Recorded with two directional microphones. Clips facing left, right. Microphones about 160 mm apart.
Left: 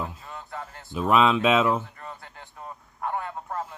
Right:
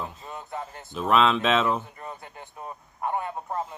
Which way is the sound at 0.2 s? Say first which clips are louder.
Right 2 dB; 20° right (ahead or behind).